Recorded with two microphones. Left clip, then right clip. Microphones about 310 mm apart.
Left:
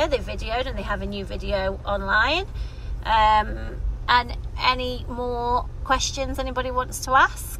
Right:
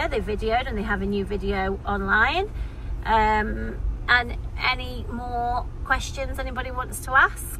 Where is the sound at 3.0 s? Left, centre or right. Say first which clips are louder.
Left 2 dB; centre.